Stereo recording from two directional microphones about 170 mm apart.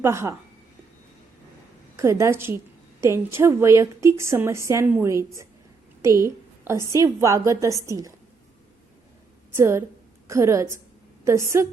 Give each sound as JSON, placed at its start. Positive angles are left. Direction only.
{"t": 0.0, "sound": "a woman's voice", "side_deg": -15}
{"t": 2.0, "sound": "a woman's voice", "side_deg": -15}
{"t": 9.6, "sound": "a woman's voice", "side_deg": -15}